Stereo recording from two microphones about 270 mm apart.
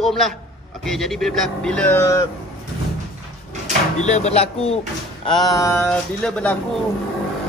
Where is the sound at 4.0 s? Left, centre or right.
Left; by 6.6 s centre.